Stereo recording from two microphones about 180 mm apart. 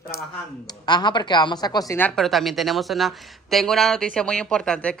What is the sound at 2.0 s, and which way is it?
Speech, centre (ahead or behind).